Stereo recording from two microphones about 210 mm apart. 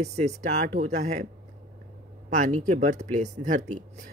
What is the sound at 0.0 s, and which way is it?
Speech, 30° right (ahead or behind).